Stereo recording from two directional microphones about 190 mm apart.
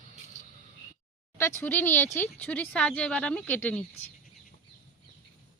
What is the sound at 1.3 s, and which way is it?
Speech, 15° left (ahead or behind).